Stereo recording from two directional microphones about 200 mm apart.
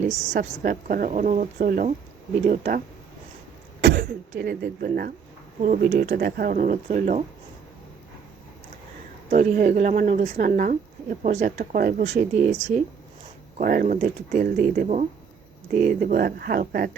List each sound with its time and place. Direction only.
0.1 s a woman's voice: 35° right (ahead or behind)
3.8 s speech: 60° right (ahead or behind); by 7.3 s 40° right (ahead or behind)
9.3 s a woman's voice: 40° right (ahead or behind)
13.6 s speech: 45° right (ahead or behind)